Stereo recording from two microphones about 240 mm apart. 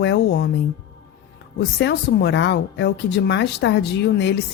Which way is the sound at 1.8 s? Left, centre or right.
Left.